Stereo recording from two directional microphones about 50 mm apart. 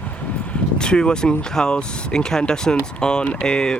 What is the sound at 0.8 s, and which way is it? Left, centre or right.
Speech, centre.